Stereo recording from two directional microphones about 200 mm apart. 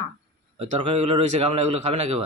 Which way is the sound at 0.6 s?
30° right (ahead or behind).